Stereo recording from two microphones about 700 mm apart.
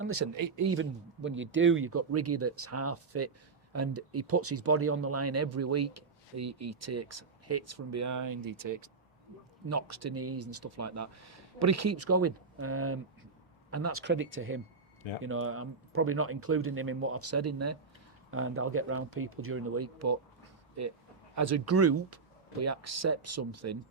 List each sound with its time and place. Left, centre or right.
0.0 s a man's voice: centre
21.3 s a man's voice: right